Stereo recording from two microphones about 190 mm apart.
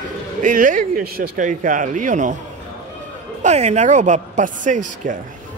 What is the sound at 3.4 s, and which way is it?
A man's voice, 40° right (ahead or behind).